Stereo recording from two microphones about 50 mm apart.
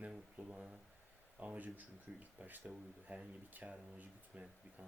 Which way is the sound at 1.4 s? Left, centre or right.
Right.